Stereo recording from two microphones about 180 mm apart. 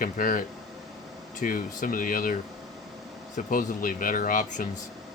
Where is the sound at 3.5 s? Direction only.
50° left (ahead or behind).